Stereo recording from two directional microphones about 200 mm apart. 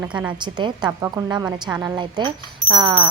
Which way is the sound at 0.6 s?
20° right (ahead or behind).